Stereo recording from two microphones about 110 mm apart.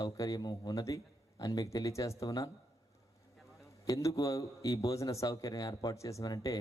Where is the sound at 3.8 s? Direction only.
30° left (ahead or behind).